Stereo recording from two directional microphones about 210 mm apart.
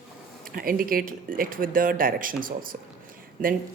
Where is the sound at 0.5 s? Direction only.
45° right (ahead or behind).